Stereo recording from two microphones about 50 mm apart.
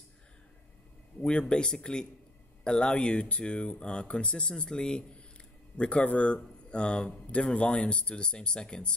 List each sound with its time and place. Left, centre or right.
1.4 s speech: centre